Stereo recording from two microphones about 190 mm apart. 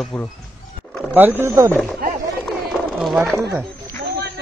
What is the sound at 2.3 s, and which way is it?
Run, centre (ahead or behind).